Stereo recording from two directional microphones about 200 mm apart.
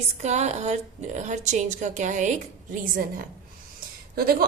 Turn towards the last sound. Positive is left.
turn(degrees=-50)  # may be behind; listen again after turning